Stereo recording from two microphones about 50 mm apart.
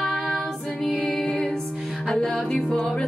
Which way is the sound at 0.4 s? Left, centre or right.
Left.